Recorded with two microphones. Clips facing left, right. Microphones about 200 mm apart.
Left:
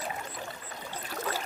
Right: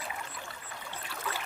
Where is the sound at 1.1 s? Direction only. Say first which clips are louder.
Left 5 dB; 40° left (ahead or behind).